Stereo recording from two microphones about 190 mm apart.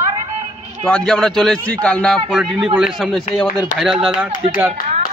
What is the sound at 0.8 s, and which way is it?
A man's voice, 5° left (ahead or behind).